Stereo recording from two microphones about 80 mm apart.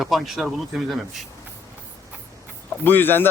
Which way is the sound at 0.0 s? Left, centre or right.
Centre.